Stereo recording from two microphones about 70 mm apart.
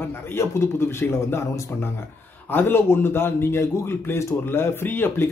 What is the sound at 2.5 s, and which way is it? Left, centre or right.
A man's voice, left.